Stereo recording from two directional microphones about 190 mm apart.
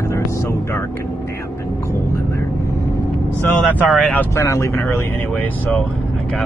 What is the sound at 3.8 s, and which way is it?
Speech, centre (ahead or behind).